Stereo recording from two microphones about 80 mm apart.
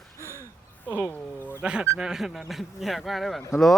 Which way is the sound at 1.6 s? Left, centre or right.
Centre.